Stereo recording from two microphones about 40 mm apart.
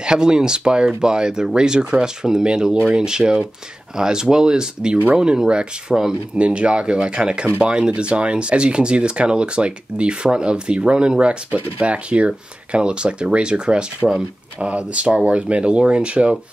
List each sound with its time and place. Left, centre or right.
0.0 s speech: centre
6.3 s speech: right